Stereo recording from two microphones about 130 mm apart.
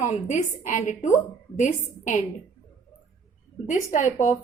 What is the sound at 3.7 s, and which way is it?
Speech, 75° left (ahead or behind).